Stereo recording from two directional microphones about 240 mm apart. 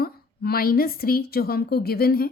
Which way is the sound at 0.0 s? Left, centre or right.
Left.